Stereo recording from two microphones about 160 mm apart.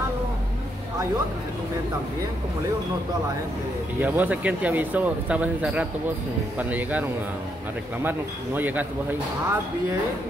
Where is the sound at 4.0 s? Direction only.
10° right (ahead or behind).